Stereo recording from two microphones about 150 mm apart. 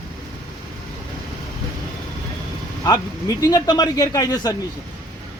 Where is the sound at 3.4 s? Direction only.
25° left (ahead or behind).